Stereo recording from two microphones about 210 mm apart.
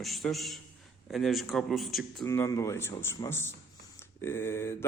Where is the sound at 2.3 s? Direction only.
15° left (ahead or behind).